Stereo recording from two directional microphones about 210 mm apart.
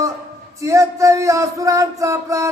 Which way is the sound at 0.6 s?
15° right (ahead or behind).